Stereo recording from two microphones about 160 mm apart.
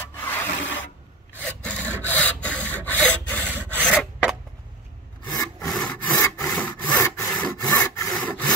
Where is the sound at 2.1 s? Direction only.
10° left (ahead or behind).